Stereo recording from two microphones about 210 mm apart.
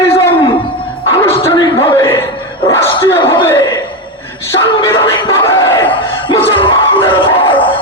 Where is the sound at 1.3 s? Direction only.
25° left (ahead or behind).